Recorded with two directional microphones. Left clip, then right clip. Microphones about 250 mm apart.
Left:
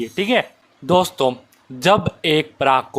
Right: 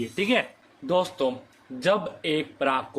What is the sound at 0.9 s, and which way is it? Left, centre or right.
Speech, left.